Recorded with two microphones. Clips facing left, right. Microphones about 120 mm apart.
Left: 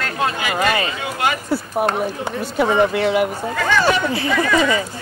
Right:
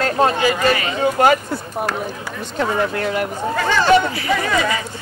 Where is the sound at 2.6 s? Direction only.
10° left (ahead or behind).